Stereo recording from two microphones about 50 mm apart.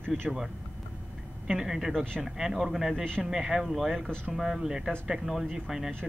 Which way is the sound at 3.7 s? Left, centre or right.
Centre.